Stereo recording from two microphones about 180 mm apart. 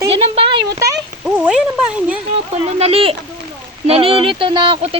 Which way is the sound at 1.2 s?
5° right (ahead or behind).